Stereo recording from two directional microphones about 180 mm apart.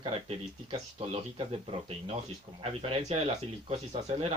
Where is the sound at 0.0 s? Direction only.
30° right (ahead or behind).